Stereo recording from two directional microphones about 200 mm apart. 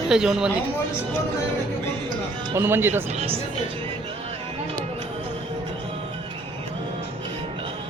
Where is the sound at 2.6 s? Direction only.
10° right (ahead or behind).